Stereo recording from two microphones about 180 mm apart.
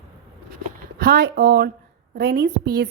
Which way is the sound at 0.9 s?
60° right (ahead or behind).